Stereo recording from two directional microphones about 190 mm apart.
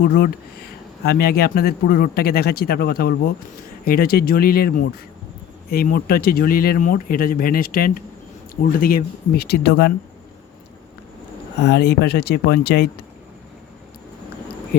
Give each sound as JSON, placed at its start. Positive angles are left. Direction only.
{"t": 0.0, "sound": "speech", "side_deg": 55}
{"t": 11.6, "sound": "speech", "side_deg": 60}